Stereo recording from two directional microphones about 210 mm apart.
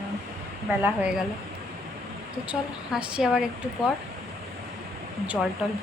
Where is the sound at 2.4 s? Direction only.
5° right (ahead or behind).